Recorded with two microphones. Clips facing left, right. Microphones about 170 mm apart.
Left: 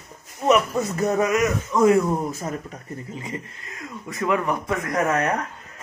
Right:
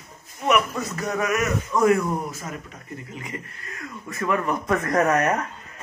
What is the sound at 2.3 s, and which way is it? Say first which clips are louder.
Speech: left 5 dB; 35° left (ahead or behind).